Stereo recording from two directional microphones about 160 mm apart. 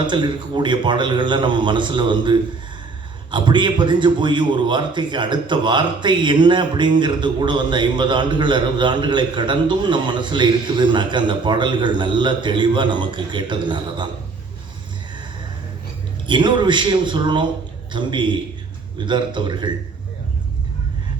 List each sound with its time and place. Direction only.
0.1 s a man's voice: 30° right (ahead or behind)
16.2 s a man's voice: 30° right (ahead or behind)